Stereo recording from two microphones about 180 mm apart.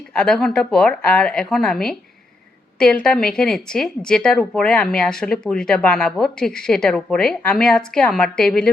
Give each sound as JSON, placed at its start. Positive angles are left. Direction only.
{"t": 0.1, "sound": "speech", "side_deg": 5}